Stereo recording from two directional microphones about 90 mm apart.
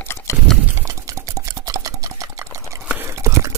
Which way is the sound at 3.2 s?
40° right (ahead or behind).